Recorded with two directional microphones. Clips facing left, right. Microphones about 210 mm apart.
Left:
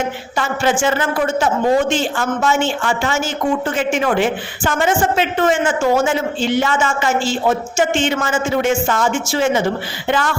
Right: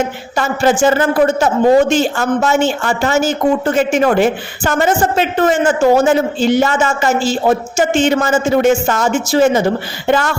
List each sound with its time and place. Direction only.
0.3 s speech: 40° right (ahead or behind)